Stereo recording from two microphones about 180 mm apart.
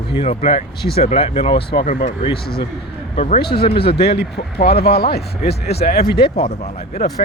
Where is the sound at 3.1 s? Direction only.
35° left (ahead or behind).